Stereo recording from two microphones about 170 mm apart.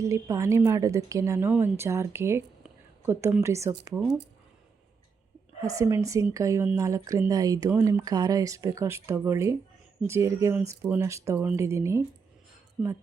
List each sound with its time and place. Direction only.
0.0 s a woman's voice: 15° right (ahead or behind)
3.9 s speech: centre (ahead or behind)
5.6 s a woman's voice: 15° right (ahead or behind)